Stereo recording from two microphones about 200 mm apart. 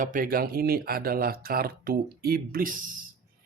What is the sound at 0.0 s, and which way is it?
Speech, 45° right (ahead or behind).